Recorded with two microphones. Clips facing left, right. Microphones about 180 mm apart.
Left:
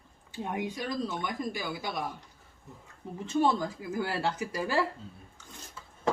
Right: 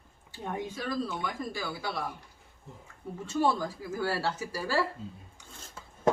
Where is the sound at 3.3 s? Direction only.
20° left (ahead or behind).